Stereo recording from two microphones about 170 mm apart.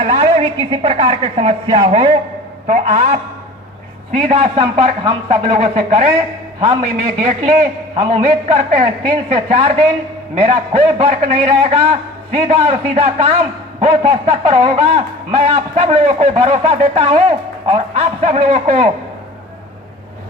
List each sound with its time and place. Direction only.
0.0 s a man's voice: 35° right (ahead or behind)
2.6 s a man's voice: 45° right (ahead or behind)